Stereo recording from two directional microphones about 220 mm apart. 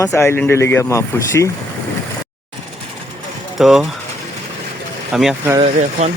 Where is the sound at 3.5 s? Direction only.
Centre (ahead or behind).